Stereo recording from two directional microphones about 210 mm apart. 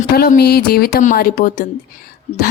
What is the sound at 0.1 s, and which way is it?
A woman's voice, 45° left (ahead or behind).